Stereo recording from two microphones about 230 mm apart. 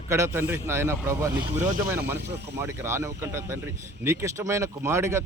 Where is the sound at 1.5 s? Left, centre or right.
Right.